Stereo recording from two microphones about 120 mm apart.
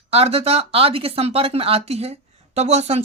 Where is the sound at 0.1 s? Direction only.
55° right (ahead or behind).